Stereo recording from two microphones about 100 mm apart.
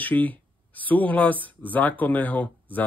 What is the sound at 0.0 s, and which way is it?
Speech, 15° left (ahead or behind).